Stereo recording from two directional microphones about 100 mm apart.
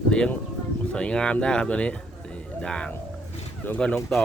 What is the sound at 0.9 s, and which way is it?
Speech, 10° left (ahead or behind).